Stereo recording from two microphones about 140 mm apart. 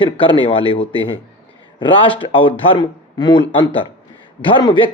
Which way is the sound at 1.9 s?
40° left (ahead or behind).